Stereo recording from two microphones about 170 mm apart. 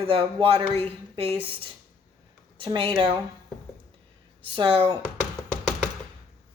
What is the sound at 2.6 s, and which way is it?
Speech, 30° right (ahead or behind).